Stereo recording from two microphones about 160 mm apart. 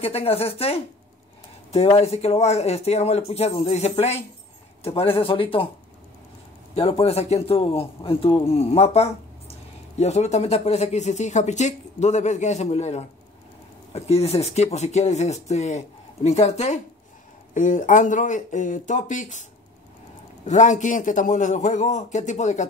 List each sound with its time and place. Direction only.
0.0 s speech: 40° left (ahead or behind)
6.7 s speech: 35° left (ahead or behind)
20.4 s speech: 50° left (ahead or behind)